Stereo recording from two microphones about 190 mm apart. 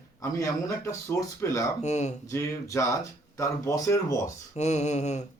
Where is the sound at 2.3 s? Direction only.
15° left (ahead or behind).